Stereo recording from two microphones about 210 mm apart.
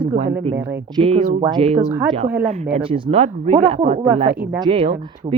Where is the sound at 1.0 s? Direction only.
30° right (ahead or behind).